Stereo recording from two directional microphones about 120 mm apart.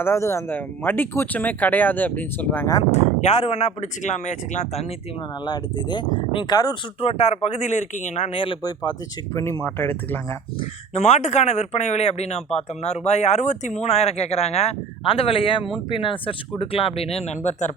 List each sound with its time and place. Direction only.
0.0 s speech: 20° left (ahead or behind)
2.9 s speech: 70° left (ahead or behind)
5.5 s speech: 40° left (ahead or behind)
7.0 s speech: 60° left (ahead or behind); by 8.3 s 85° left
8.3 s speech: 45° left (ahead or behind)
8.6 s speech: 35° left (ahead or behind)
9.3 s speech: 25° left (ahead or behind)
10.6 s speech: 60° left (ahead or behind)